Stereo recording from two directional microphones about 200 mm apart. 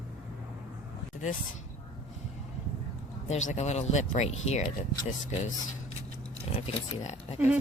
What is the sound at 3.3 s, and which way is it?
Speech, 35° left (ahead or behind).